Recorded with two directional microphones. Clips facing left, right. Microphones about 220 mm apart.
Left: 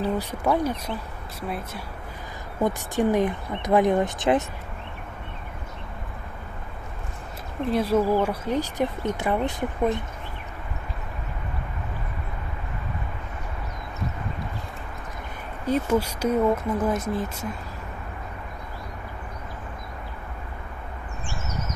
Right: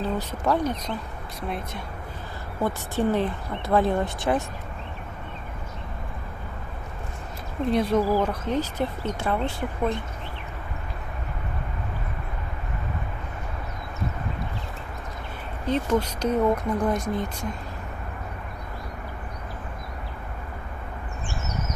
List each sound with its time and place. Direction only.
0.0 s speech: 10° left (ahead or behind)
2.6 s speech: 15° left (ahead or behind)
7.7 s speech: 5° left (ahead or behind)
15.6 s speech: 10° left (ahead or behind)